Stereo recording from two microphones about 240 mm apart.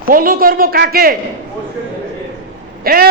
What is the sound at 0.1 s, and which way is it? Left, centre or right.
A man's voice, right.